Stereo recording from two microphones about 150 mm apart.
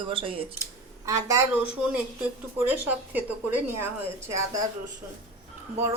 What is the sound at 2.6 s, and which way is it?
A woman's voice, 10° right (ahead or behind).